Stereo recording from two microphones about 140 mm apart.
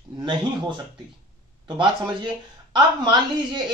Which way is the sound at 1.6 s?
35° right (ahead or behind).